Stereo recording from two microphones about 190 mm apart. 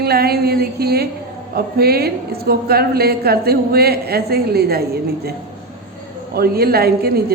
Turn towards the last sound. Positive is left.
turn(degrees=-55)  # may be behind; listen again after turning